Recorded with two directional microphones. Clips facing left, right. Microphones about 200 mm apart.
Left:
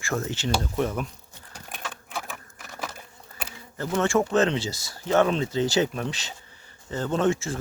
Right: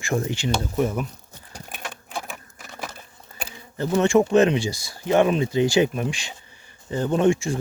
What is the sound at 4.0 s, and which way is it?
Speech, 15° right (ahead or behind).